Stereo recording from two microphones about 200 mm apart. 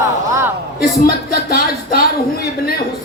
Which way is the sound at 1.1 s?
50° left (ahead or behind).